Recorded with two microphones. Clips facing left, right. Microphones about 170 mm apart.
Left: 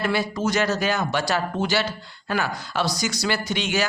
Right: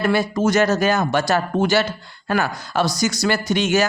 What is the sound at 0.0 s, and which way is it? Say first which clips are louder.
Speech: right 5 dB; 45° right (ahead or behind).